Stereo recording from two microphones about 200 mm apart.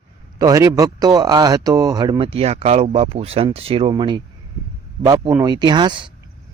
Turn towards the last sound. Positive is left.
turn(degrees=-25)  # may be behind; listen again after turning